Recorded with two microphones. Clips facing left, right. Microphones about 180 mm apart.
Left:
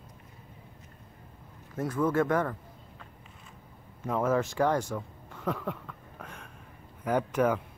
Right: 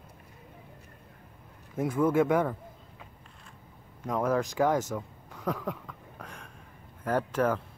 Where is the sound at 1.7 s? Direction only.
10° right (ahead or behind).